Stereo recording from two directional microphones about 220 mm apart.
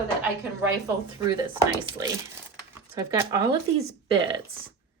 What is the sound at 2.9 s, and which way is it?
Speech, 20° right (ahead or behind).